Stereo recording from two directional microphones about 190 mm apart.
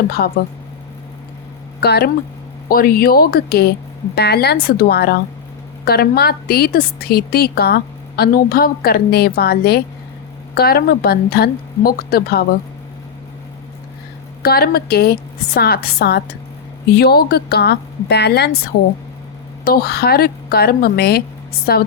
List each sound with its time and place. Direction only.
0.2 s a woman's voice: 60° left (ahead or behind)
1.8 s a woman's voice: 55° left (ahead or behind)
14.4 s a woman's voice: 55° left (ahead or behind)
19.6 s a woman's voice: 55° left (ahead or behind)